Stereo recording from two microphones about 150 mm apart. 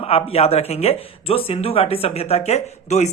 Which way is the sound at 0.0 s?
40° left (ahead or behind).